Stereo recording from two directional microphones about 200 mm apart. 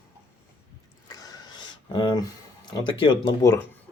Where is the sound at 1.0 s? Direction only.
20° left (ahead or behind).